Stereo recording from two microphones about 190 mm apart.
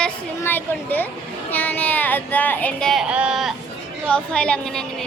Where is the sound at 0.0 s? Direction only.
10° left (ahead or behind).